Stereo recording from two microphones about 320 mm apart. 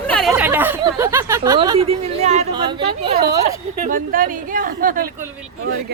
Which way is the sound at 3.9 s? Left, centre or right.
Right.